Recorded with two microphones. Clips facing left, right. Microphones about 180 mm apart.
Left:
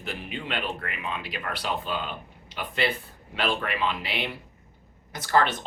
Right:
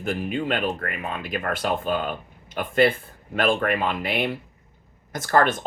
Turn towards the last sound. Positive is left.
turn(degrees=-50)  # may be behind; listen again after turning